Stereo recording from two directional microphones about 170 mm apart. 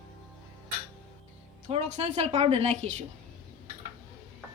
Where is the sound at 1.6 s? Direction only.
45° right (ahead or behind).